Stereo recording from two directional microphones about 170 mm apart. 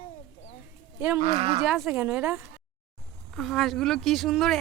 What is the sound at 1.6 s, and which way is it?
Speech, centre (ahead or behind).